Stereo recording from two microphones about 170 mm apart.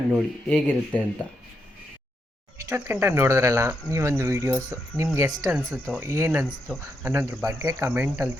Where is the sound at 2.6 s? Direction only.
15° right (ahead or behind).